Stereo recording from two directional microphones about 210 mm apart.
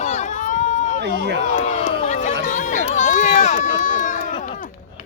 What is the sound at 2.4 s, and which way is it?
Run, 35° left (ahead or behind).